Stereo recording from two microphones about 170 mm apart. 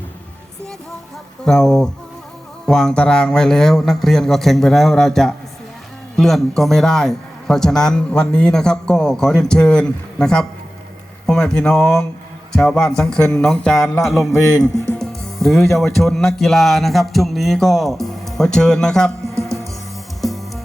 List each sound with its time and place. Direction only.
1.5 s a man's voice: centre (ahead or behind)
14.5 s speech: 20° left (ahead or behind)
14.9 s a man's voice: centre (ahead or behind)
19.3 s music: 15° right (ahead or behind)
20.2 s music: centre (ahead or behind)